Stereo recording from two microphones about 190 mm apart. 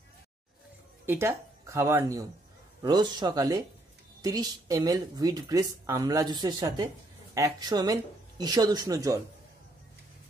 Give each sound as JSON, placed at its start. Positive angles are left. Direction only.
{"t": 1.0, "sound": "speech", "side_deg": -15}